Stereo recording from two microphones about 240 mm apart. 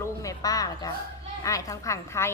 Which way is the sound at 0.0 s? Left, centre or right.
Centre.